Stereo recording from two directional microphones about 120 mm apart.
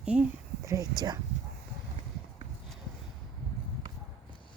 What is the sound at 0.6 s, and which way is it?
Speech, 30° right (ahead or behind).